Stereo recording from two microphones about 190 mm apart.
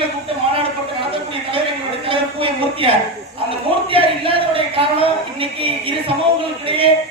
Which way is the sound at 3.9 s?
30° right (ahead or behind).